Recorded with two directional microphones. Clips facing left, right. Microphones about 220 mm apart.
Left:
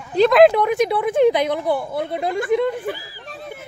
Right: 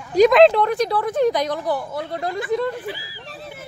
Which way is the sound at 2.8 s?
50° left (ahead or behind).